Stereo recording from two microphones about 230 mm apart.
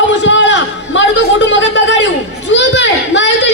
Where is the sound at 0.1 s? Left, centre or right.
Left.